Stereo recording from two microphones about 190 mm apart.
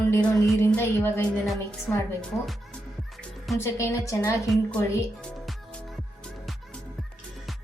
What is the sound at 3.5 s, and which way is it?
Speech, 15° left (ahead or behind).